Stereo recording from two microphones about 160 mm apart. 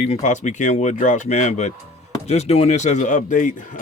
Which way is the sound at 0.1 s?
50° left (ahead or behind).